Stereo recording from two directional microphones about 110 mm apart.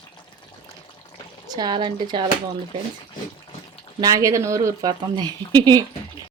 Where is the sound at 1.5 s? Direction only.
40° right (ahead or behind).